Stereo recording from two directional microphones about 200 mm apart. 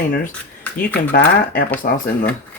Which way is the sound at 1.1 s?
50° left (ahead or behind).